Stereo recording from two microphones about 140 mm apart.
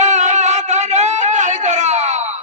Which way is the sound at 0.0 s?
55° right (ahead or behind).